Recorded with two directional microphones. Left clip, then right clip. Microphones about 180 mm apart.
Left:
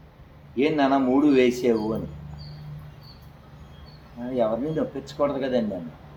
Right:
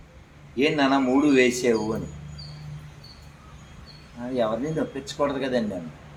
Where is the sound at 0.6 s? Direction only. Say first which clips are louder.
Even; 15° right (ahead or behind).